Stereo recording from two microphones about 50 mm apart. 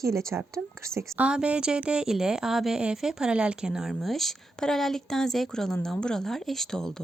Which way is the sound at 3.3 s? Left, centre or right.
Right.